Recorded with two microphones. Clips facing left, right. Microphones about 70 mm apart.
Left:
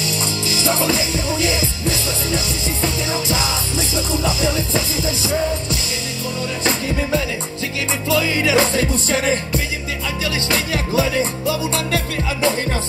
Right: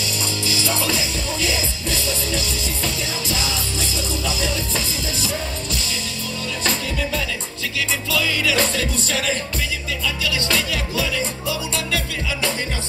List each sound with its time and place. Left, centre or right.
0.6 s music: left
6.6 s music: left